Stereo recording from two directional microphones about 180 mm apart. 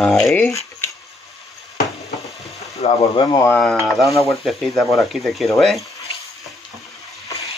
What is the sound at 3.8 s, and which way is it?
Speech, centre (ahead or behind).